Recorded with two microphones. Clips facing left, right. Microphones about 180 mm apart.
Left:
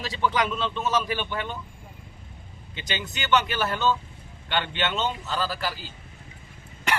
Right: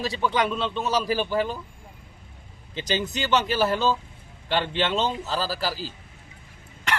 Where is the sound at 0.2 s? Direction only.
25° right (ahead or behind).